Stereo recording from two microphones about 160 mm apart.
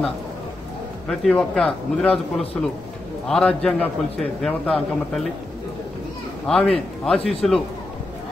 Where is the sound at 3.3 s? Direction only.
5° left (ahead or behind).